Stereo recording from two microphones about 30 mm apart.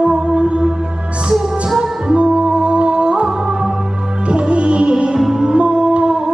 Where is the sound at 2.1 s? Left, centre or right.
Right.